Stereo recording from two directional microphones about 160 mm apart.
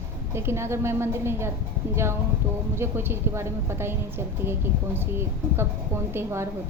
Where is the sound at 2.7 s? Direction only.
15° right (ahead or behind).